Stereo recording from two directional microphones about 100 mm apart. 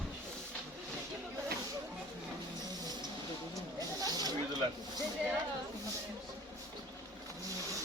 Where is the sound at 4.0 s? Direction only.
40° right (ahead or behind).